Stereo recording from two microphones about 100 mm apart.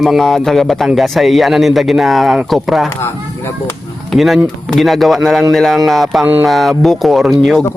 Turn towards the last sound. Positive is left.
turn(degrees=5)  # may be behind; listen again after turning